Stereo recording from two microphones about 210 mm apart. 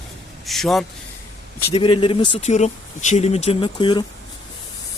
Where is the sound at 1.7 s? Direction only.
25° left (ahead or behind).